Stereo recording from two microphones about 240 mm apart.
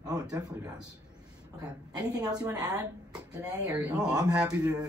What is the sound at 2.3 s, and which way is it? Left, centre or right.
A man's voice, centre.